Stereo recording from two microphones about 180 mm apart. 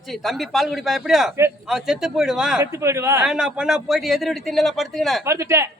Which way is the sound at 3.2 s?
5° right (ahead or behind).